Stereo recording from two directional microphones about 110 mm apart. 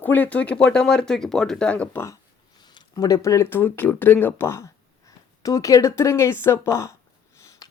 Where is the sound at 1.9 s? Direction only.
25° left (ahead or behind).